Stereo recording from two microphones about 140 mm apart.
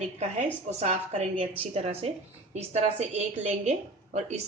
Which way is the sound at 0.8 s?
55° right (ahead or behind).